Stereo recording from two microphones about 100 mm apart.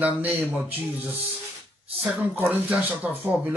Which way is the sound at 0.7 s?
20° right (ahead or behind).